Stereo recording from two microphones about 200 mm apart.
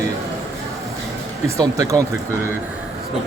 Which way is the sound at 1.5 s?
15° right (ahead or behind).